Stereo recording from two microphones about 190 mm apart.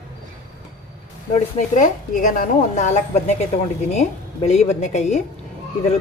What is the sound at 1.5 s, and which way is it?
A woman's voice, 40° left (ahead or behind).